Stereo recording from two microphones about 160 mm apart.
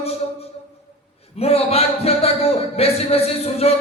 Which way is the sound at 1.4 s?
40° left (ahead or behind).